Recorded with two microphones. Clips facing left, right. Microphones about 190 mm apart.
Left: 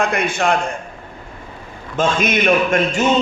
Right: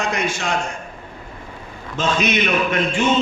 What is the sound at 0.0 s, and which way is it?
Speech, 55° left (ahead or behind).